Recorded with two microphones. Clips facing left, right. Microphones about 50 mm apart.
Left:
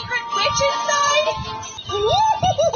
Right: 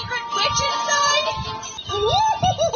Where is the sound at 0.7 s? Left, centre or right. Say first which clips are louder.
Left 1 dB; centre.